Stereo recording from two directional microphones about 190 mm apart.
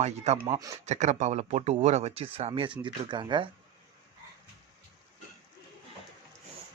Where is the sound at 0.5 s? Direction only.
15° right (ahead or behind).